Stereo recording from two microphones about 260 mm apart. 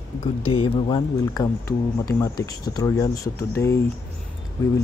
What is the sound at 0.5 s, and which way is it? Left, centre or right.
Speech, centre.